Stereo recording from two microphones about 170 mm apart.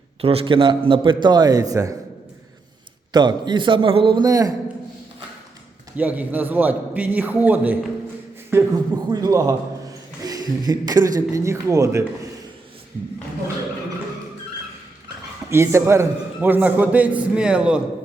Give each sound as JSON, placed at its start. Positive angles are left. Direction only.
{"t": 0.2, "sound": "a man's voice", "side_deg": -35}
{"t": 3.1, "sound": "a man's voice", "side_deg": -25}
{"t": 6.0, "sound": "a man's voice", "side_deg": -10}
{"t": 15.4, "sound": "a man's voice", "side_deg": -15}